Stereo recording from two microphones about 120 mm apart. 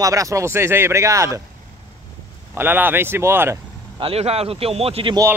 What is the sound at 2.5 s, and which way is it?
Speech, 15° right (ahead or behind).